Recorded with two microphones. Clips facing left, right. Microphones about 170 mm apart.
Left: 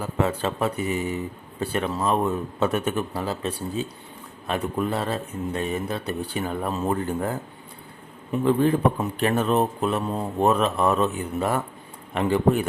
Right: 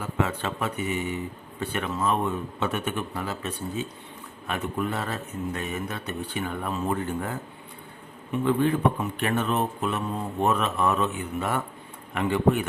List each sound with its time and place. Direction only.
0.0 s speech: 35° left (ahead or behind)